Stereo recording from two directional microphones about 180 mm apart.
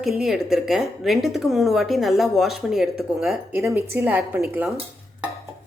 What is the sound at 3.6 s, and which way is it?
A woman's voice, 15° right (ahead or behind).